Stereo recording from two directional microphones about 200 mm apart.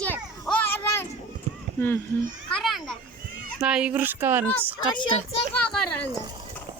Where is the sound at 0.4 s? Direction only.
5° left (ahead or behind).